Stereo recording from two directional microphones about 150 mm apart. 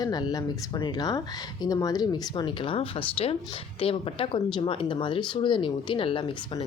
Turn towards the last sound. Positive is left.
turn(degrees=35)  # may be behind; listen again after turning